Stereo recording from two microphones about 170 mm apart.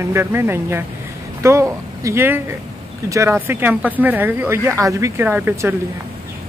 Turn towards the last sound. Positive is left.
turn(degrees=-15)  # may be behind; listen again after turning